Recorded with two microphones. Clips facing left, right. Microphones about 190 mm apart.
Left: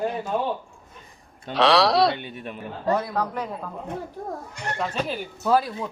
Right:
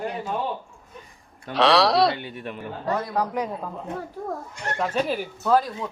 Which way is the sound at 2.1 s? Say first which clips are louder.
Right 1 dB; 20° left (ahead or behind).